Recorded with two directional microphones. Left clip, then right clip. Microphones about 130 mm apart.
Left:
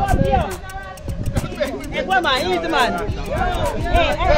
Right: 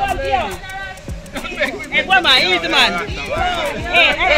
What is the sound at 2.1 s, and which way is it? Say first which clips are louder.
Speech: right 5 dB; 45° left (ahead or behind).